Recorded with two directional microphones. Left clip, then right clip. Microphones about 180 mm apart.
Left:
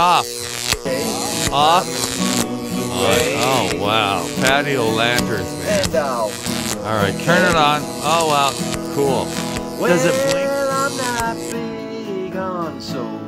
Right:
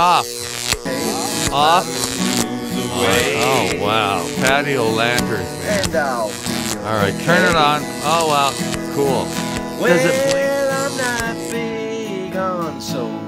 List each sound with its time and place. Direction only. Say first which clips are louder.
0.7 s music: left 1 dB; centre (ahead or behind)
3.0 s speech: even; centre (ahead or behind)
6.9 s speech: even; centre (ahead or behind)
10.5 s music: right 1 dB; 55° right (ahead or behind)
10.8 s music: even; centre (ahead or behind)